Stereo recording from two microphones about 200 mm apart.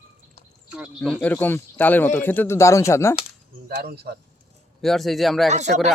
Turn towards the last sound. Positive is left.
turn(degrees=-35)  # may be behind; listen again after turning